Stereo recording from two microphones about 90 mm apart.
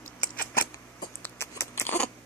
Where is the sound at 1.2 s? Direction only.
30° left (ahead or behind).